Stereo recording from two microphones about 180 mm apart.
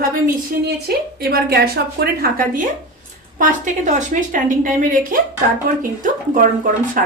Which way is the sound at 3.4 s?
40° right (ahead or behind).